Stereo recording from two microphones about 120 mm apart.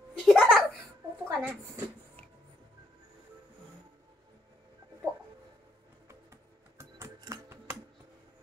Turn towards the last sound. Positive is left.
turn(degrees=-20)  # may be behind; listen again after turning